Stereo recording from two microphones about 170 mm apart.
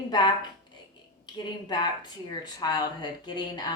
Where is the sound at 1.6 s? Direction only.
25° left (ahead or behind).